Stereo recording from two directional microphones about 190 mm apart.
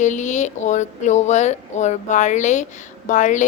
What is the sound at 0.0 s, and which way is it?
A woman's voice, 40° left (ahead or behind).